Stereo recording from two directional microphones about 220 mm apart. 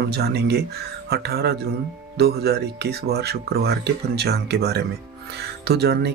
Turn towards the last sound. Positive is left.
turn(degrees=-45)  # may be behind; listen again after turning